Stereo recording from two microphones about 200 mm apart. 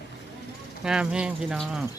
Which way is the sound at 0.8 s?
5° right (ahead or behind).